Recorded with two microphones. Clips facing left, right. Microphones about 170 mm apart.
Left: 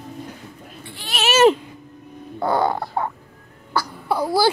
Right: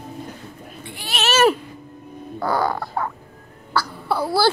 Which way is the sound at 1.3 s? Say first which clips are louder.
Left 3 dB; 20° left (ahead or behind).